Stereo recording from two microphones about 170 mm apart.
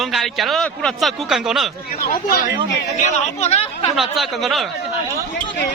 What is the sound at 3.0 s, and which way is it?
Speech, 40° left (ahead or behind).